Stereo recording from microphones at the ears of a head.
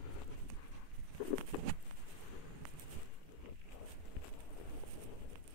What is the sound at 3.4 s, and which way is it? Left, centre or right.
Walk, left.